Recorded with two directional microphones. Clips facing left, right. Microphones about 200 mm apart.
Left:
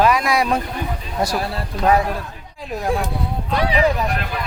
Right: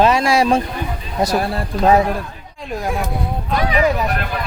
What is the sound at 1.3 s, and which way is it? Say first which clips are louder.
Speech: right 4 dB; 55° right (ahead or behind).